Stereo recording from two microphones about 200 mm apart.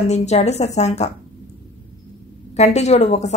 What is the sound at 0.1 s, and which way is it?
Speech, 35° left (ahead or behind).